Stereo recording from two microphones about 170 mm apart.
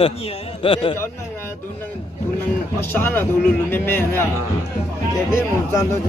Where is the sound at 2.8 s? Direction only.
10° left (ahead or behind).